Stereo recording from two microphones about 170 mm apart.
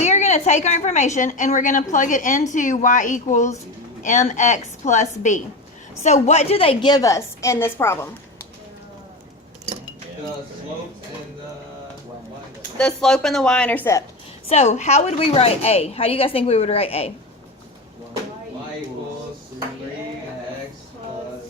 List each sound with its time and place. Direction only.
0.0 s a woman's voice: 40° left (ahead or behind); by 7.9 s 15° left (ahead or behind)
12.7 s speech: 5° left (ahead or behind)
14.5 s a woman's voice: 40° left (ahead or behind)